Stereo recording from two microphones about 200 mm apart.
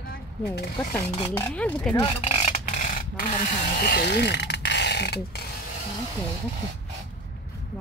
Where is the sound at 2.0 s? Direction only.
30° left (ahead or behind); by 5.4 s 55° left (ahead or behind).